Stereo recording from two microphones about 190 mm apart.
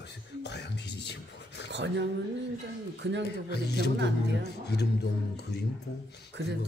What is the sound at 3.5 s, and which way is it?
Speech, 60° left (ahead or behind).